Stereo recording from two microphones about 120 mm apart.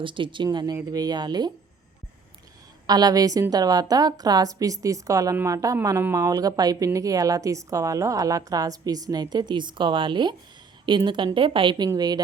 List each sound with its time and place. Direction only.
0.0 s speech: 45° right (ahead or behind)
2.8 s a woman's voice: 35° right (ahead or behind)